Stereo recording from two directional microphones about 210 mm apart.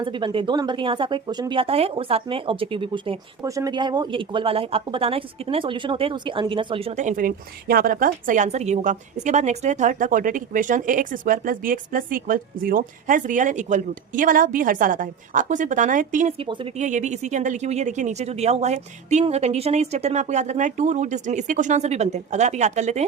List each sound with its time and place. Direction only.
0.0 s speech: 20° right (ahead or behind); by 16.3 s 40° right (ahead or behind)
16.4 s speech: 25° right (ahead or behind)